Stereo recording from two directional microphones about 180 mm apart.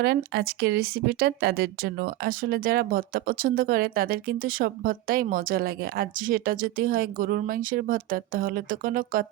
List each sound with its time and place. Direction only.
0.0 s speech: 60° right (ahead or behind)